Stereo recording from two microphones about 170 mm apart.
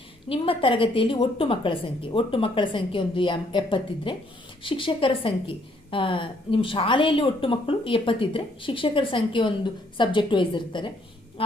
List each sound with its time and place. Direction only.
0.3 s a woman's voice: 30° left (ahead or behind)
11.4 s quack: 30° left (ahead or behind)